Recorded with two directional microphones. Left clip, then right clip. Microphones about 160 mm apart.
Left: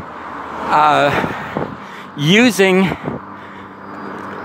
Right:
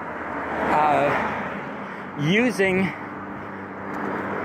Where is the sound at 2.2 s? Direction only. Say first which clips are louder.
Left 9 dB; 55° left (ahead or behind).